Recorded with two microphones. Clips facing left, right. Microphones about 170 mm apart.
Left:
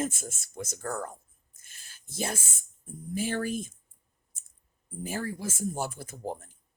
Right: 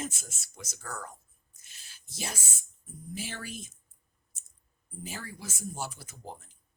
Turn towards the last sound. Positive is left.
turn(degrees=55)  # may be behind; listen again after turning